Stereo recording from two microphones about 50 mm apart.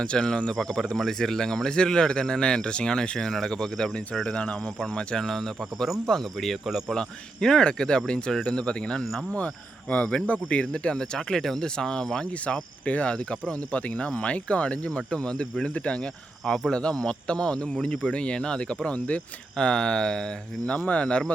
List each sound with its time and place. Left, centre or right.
0.0 s speech: centre
4.3 s speech: left
5.1 s speech: centre
6.7 s speech: centre
7.4 s speech: centre
10.2 s speech: left
20.7 s speech: left